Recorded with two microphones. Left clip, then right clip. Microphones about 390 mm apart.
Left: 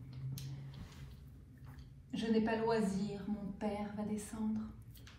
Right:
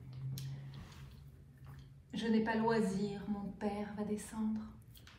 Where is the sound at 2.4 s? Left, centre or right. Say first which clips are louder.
Right 2 dB; centre.